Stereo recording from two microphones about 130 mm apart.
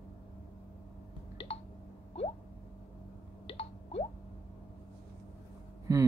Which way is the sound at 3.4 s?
50° left (ahead or behind).